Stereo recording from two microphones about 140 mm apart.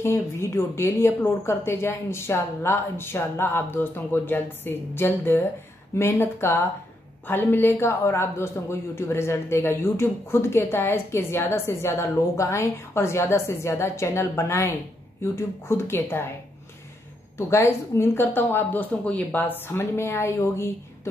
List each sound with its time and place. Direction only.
0.0 s a woman's voice: 20° left (ahead or behind)
17.4 s a woman's voice: 20° left (ahead or behind)